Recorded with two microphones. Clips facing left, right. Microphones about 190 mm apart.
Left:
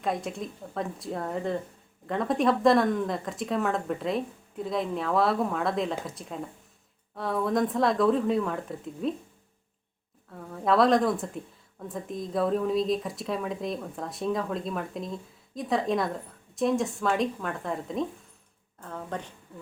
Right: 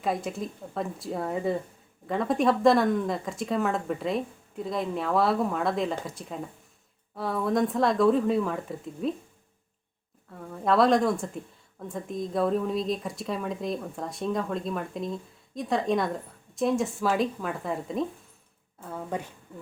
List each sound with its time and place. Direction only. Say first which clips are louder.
0.0 s speech: right 1 dB; centre (ahead or behind)
10.5 s a woman's voice: even; centre (ahead or behind)